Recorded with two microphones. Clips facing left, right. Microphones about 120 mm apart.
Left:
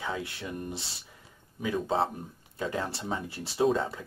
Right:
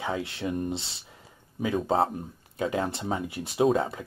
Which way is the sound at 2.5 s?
20° right (ahead or behind).